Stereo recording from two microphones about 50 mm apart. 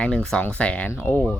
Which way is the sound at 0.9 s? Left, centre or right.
Left.